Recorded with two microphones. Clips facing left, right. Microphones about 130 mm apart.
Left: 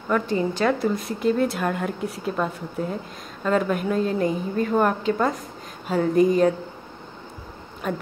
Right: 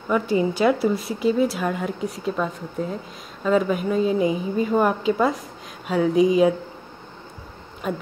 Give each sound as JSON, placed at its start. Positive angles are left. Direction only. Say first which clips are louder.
{"t": 0.1, "sound": "a woman's voice", "louder": "right 2 dB", "side_deg": -10}
{"t": 7.8, "sound": "a woman's voice", "louder": "even", "side_deg": 0}